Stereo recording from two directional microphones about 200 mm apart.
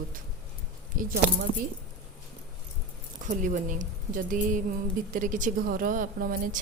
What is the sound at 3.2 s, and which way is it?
A woman's voice, 40° right (ahead or behind).